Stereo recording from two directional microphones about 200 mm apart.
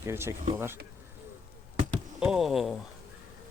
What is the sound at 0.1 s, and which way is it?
Speech, 10° right (ahead or behind).